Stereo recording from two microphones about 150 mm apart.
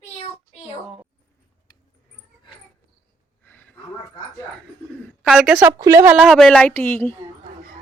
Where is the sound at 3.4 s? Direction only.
10° left (ahead or behind).